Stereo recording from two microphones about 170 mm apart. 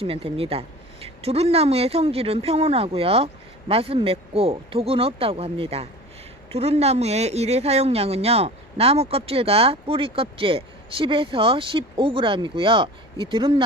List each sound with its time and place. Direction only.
0.0 s speech: 35° right (ahead or behind)